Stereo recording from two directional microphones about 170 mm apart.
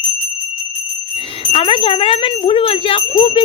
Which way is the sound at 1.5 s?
35° left (ahead or behind).